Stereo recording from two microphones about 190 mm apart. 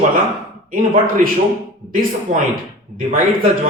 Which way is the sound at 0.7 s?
50° right (ahead or behind).